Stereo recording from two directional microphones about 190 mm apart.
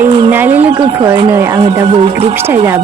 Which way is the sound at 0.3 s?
10° right (ahead or behind).